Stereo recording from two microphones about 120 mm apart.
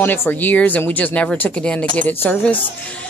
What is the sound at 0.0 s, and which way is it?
Speech, 15° left (ahead or behind).